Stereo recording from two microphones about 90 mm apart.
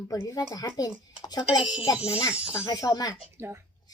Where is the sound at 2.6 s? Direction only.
40° left (ahead or behind).